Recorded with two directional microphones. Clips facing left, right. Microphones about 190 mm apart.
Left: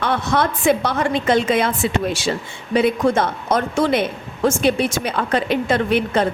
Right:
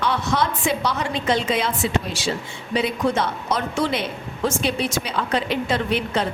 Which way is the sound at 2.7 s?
50° left (ahead or behind).